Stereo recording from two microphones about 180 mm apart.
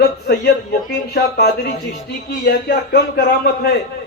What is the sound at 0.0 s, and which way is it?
A man's voice, 65° left (ahead or behind).